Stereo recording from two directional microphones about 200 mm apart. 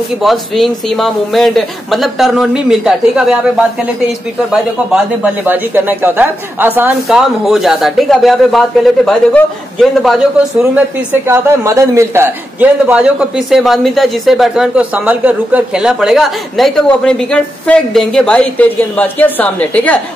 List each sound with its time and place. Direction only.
0.2 s a man's voice: centre (ahead or behind)
11.2 s a man's voice: 15° right (ahead or behind); by 20.0 s 10° left (ahead or behind)